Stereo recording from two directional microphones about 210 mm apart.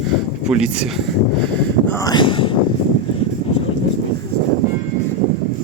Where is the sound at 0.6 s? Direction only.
Centre (ahead or behind).